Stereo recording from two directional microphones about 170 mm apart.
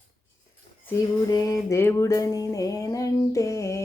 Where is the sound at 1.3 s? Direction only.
20° left (ahead or behind).